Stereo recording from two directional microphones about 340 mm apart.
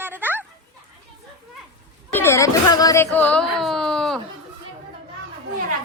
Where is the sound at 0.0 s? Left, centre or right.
Centre.